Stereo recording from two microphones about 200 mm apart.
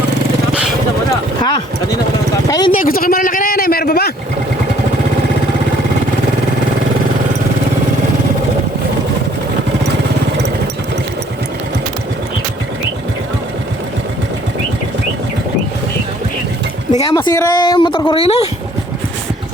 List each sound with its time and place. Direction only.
2.5 s speech: 20° left (ahead or behind)
2.7 s a sound: 45° left (ahead or behind)
17.0 s speech: 20° left (ahead or behind)